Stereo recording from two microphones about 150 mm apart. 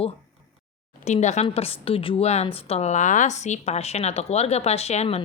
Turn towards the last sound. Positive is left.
turn(degrees=45)  # may be behind; listen again after turning